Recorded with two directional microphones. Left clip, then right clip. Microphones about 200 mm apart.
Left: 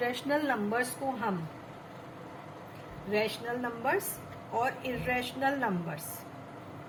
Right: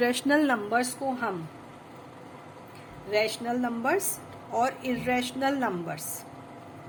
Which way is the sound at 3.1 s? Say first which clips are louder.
Right 4 dB; 55° right (ahead or behind).